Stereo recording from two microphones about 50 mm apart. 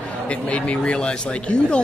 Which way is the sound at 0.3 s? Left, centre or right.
Left.